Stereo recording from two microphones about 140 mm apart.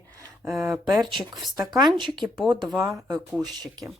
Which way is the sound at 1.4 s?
Centre (ahead or behind).